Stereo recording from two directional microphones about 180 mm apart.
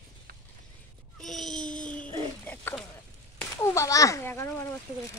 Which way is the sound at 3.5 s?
15° left (ahead or behind).